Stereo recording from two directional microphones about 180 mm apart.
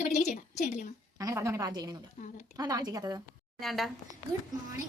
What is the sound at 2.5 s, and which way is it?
Speech, 20° right (ahead or behind).